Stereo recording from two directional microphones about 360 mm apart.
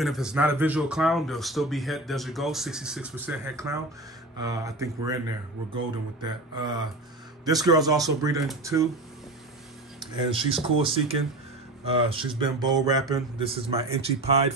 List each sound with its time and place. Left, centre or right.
0.0 s speech: centre
6.2 s speech: centre
10.1 s speech: centre